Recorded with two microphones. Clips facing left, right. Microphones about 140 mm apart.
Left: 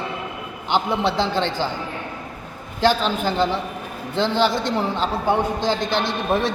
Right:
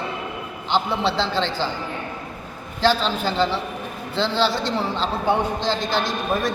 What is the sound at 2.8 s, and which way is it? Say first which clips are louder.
A man's voice: left 1 dB; 15° left (ahead or behind).